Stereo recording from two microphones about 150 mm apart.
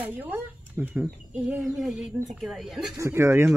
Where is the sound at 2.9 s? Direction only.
20° right (ahead or behind).